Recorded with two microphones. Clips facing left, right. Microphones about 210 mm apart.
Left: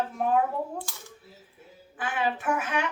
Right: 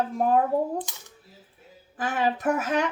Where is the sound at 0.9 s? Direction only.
20° right (ahead or behind).